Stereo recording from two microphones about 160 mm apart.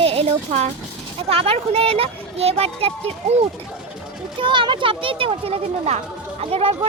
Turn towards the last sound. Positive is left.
turn(degrees=-35)  # may be behind; listen again after turning